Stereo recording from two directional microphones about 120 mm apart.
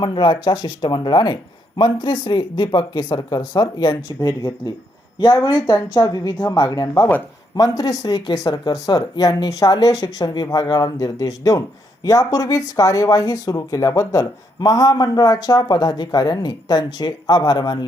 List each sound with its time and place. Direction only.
0.0 s speech: 40° left (ahead or behind)